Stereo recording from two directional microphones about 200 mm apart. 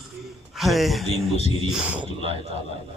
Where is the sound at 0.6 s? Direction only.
Centre (ahead or behind).